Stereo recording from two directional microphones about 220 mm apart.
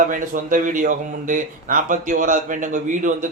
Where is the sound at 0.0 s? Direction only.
35° right (ahead or behind).